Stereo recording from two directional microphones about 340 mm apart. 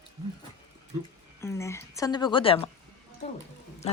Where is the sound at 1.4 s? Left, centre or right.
Centre.